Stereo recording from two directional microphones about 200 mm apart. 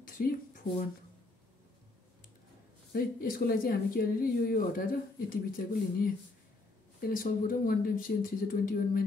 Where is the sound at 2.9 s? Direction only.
45° left (ahead or behind).